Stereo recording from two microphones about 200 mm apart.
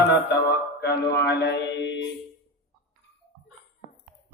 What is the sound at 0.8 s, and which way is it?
Mantra, 55° left (ahead or behind).